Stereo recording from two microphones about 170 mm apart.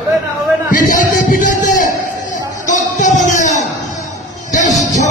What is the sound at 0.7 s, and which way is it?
Music, 50° left (ahead or behind).